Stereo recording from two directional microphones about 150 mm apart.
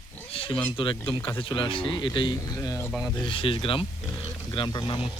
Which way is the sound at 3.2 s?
35° left (ahead or behind).